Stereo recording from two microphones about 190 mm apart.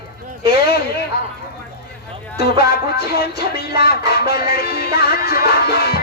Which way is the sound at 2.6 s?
55° left (ahead or behind).